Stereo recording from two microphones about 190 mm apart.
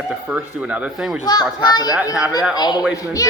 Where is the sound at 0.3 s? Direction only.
5° right (ahead or behind).